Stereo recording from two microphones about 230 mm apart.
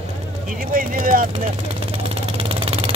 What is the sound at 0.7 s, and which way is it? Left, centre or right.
Speech, right.